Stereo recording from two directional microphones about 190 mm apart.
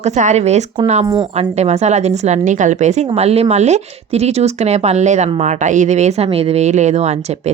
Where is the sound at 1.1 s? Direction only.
25° right (ahead or behind).